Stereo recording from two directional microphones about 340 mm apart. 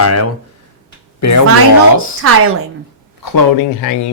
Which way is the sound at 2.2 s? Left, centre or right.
Right.